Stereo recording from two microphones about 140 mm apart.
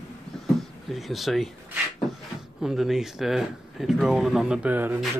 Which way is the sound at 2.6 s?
5° right (ahead or behind).